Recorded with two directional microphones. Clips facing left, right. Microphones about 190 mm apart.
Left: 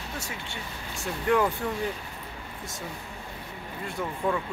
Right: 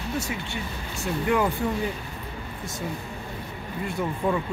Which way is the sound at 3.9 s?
10° right (ahead or behind).